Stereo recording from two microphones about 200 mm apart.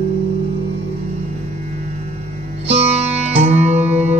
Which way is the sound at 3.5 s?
35° right (ahead or behind).